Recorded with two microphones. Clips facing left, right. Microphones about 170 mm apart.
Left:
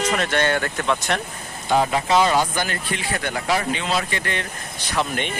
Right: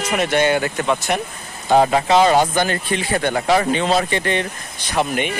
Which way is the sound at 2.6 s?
25° right (ahead or behind).